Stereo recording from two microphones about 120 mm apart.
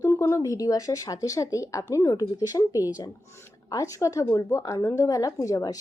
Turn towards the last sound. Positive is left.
turn(degrees=30)  # may be behind; listen again after turning